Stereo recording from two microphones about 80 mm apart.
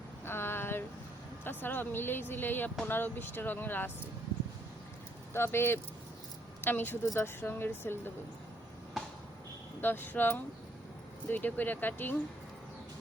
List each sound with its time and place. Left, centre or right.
0.3 s a sound: left
1.5 s speech: left
5.3 s speech: left
9.8 s speech: left